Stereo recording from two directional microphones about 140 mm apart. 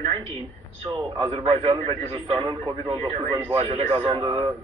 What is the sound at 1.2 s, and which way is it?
Speech, 45° right (ahead or behind).